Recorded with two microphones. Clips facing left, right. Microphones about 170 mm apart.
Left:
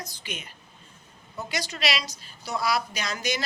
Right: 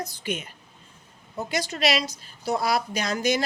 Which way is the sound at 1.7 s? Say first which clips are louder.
Right 6 dB; 50° right (ahead or behind).